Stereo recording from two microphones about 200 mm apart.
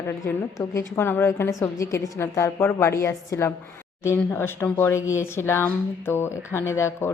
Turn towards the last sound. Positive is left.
turn(degrees=15)  # may be behind; listen again after turning